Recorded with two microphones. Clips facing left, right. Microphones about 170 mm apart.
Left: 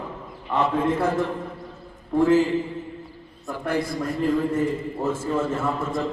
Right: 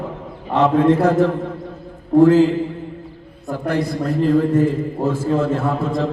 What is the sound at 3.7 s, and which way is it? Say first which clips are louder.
A man's voice: right 5 dB; 65° right (ahead or behind).